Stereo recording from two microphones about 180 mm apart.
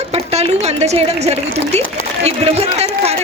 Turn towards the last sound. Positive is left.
turn(degrees=-35)  # may be behind; listen again after turning